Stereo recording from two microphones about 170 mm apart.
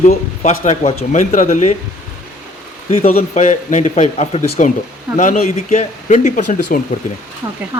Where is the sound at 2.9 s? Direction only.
35° left (ahead or behind).